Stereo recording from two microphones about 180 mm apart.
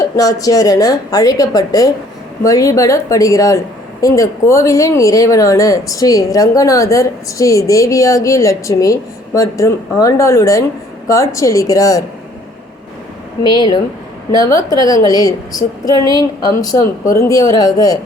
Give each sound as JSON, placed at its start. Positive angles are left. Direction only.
{"t": 0.2, "sound": "a woman's voice", "side_deg": 20}
{"t": 13.4, "sound": "a woman's voice", "side_deg": 25}